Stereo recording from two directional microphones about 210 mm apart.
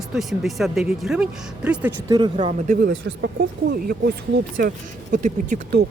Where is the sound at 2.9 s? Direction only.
60° right (ahead or behind); by 5.5 s 40° right (ahead or behind).